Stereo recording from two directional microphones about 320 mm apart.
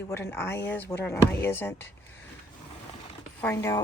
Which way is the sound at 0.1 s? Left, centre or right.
Centre.